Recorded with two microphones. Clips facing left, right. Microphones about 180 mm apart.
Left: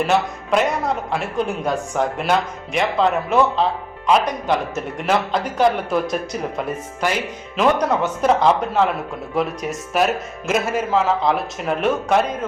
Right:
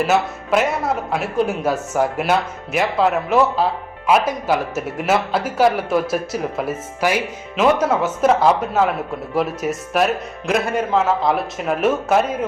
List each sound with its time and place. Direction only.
0.0 s a man's voice: 5° right (ahead or behind)